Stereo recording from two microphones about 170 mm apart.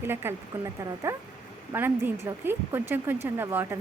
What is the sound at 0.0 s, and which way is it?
Speech, 15° right (ahead or behind).